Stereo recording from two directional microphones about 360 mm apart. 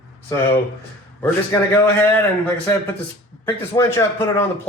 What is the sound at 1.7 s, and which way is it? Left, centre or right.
Speech, centre.